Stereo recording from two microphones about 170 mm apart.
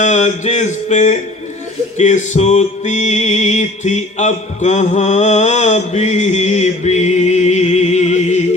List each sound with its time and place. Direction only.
0.0 s music: 45° left (ahead or behind)